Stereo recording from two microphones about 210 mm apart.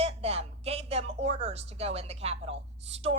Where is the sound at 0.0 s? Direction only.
30° right (ahead or behind).